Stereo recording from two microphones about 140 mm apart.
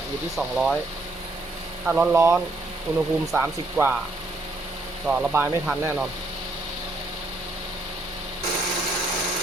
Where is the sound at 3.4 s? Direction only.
15° right (ahead or behind).